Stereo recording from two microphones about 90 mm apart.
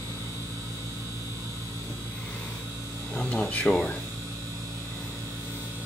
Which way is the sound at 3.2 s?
15° left (ahead or behind).